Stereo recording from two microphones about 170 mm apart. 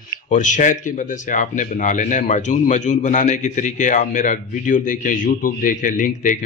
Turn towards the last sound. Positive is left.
turn(degrees=50)  # may be behind; listen again after turning